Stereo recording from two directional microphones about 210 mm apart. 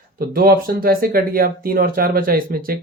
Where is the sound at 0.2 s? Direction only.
45° right (ahead or behind).